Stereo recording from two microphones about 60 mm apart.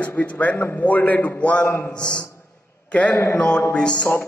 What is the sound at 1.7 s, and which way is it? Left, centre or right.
Speech, left.